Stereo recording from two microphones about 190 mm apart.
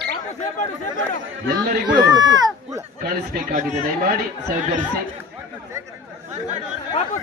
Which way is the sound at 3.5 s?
40° right (ahead or behind).